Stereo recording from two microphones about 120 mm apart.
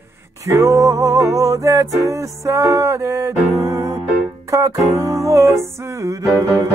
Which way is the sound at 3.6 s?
30° right (ahead or behind).